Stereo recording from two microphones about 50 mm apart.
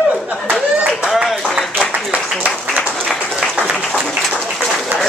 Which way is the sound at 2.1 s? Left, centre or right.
Right.